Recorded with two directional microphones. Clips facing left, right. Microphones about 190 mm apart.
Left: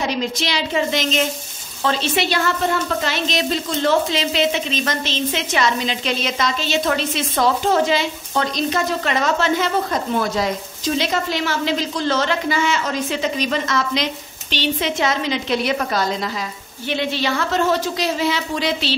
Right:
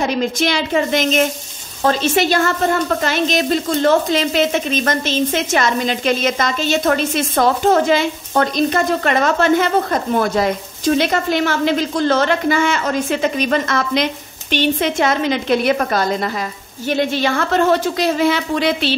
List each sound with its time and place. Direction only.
0.0 s a woman's voice: 50° right (ahead or behind)